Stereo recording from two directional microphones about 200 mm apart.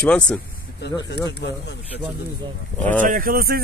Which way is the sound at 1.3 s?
55° left (ahead or behind).